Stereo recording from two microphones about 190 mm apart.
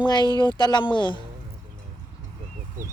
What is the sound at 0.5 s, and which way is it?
Speech, 20° left (ahead or behind).